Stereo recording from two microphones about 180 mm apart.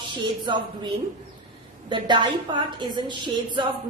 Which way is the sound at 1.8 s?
25° right (ahead or behind).